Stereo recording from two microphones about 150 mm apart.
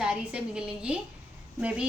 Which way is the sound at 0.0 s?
5° right (ahead or behind).